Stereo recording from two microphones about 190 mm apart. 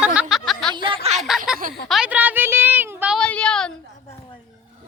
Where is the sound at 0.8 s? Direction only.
30° right (ahead or behind).